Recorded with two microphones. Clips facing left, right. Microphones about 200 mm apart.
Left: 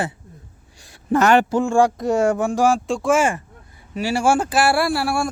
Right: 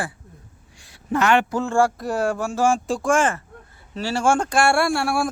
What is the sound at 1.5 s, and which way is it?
Speech, 15° left (ahead or behind).